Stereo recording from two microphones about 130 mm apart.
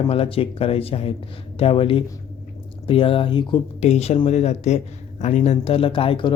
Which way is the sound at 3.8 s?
55° left (ahead or behind).